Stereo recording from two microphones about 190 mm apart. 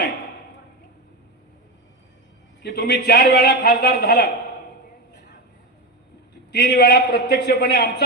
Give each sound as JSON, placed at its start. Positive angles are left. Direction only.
{"t": 2.6, "sound": "a man's voice", "side_deg": 60}
{"t": 6.5, "sound": "a man's voice", "side_deg": 60}